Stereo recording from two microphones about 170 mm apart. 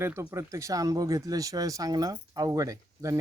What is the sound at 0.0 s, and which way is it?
Speech, 15° right (ahead or behind).